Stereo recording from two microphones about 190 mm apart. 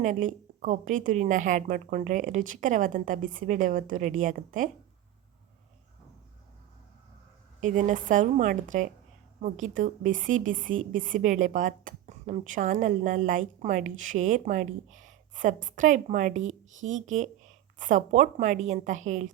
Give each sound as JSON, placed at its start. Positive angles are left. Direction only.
{"t": 0.0, "sound": "a woman's voice", "side_deg": -45}
{"t": 7.6, "sound": "a woman's voice", "side_deg": -45}